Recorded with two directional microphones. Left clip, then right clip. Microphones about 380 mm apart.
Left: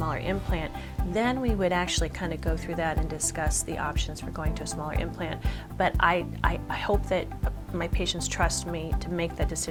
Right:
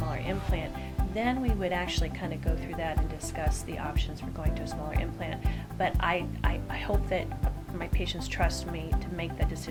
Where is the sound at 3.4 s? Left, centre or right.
Left.